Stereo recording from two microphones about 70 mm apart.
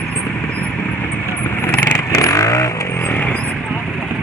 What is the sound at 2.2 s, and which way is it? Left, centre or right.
Vehicle, left.